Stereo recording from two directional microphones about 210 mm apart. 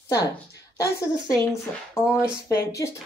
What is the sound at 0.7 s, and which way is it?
Speech, 15° left (ahead or behind).